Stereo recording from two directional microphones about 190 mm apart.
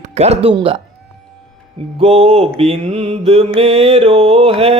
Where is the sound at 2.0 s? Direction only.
30° right (ahead or behind).